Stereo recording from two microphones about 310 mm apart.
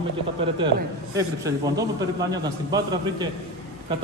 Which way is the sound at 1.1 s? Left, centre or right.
Centre.